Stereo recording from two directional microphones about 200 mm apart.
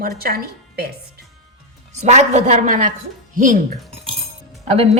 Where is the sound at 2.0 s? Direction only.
35° right (ahead or behind).